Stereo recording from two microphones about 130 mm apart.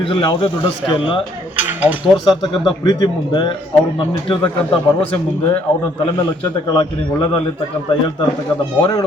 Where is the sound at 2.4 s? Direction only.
30° left (ahead or behind).